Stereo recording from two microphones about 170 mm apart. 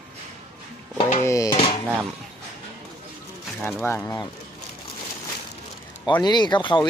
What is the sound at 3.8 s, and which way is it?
Speech, 10° left (ahead or behind).